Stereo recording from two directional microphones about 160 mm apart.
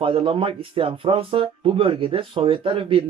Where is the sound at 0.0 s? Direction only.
35° right (ahead or behind).